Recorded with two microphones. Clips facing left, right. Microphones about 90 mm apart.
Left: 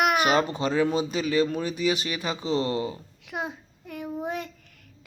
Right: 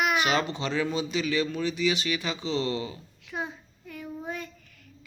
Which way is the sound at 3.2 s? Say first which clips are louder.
Left 2 dB; 65° left (ahead or behind).